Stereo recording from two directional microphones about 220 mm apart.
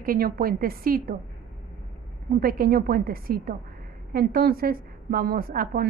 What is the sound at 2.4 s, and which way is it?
A woman's voice, 40° right (ahead or behind).